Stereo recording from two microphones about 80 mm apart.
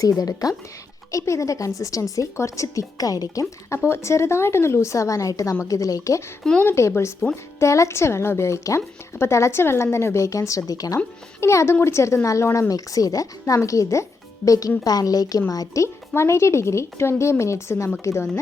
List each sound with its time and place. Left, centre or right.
0.0 s speech: left
3.8 s a woman's voice: left
11.3 s a woman's voice: left